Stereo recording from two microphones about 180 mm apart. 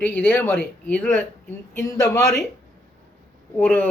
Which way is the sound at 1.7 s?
20° left (ahead or behind).